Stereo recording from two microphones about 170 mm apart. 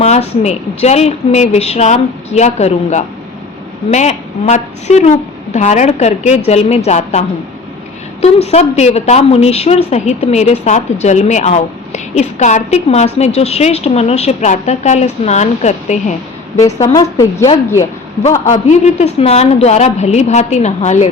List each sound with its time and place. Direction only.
0.0 s speech: 40° left (ahead or behind)
16.8 s speech: 20° left (ahead or behind)
18.2 s speech: 40° left (ahead or behind)